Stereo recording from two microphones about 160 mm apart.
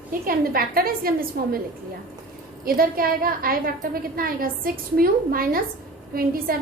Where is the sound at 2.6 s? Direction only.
65° right (ahead or behind).